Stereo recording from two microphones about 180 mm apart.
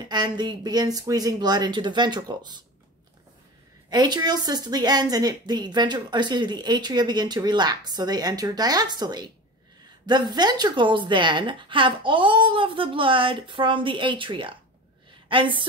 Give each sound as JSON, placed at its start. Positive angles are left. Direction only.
{"t": 0.1, "sound": "speech", "side_deg": -25}
{"t": 3.9, "sound": "a woman's voice", "side_deg": -25}